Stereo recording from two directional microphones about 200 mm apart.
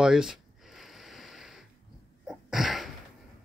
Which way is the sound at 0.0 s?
5° right (ahead or behind).